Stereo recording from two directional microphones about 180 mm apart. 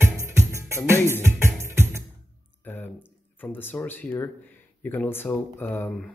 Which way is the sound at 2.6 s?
10° left (ahead or behind).